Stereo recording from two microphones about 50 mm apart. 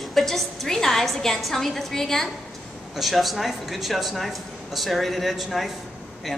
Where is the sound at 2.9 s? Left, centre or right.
Centre.